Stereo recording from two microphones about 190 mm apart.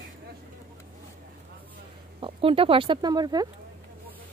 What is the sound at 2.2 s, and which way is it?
Speech, 30° right (ahead or behind).